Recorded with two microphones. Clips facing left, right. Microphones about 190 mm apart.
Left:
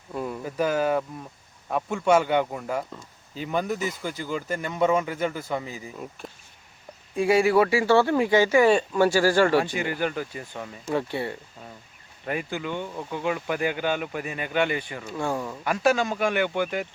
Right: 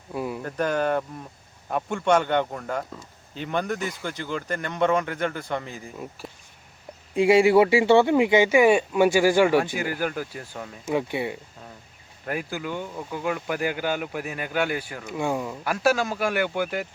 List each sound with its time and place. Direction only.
0.1 s a sound: 5° right (ahead or behind)
0.4 s speech: 5° left (ahead or behind)
7.2 s speech: 25° right (ahead or behind)
9.6 s speech: 5° right (ahead or behind)
12.2 s speech: centre (ahead or behind)